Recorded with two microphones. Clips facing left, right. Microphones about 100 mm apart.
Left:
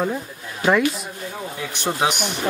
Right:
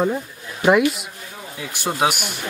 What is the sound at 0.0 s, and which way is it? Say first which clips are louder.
Speech: right 3 dB; 10° right (ahead or behind).